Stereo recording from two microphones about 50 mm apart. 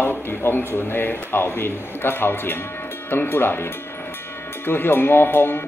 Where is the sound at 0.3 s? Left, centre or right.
Left.